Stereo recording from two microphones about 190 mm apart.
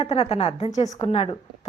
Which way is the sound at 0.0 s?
30° left (ahead or behind).